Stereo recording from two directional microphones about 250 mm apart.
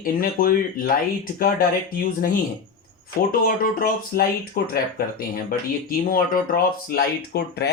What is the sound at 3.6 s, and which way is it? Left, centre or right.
Speech, left.